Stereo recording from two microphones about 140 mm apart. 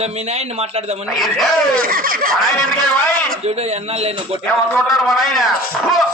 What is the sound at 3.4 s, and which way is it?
Speech, 50° right (ahead or behind).